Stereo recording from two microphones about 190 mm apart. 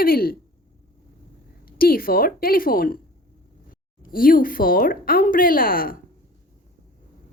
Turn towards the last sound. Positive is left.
turn(degrees=50)  # may be behind; listen again after turning